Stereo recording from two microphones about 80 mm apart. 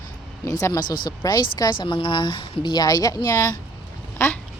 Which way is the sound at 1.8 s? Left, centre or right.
Left.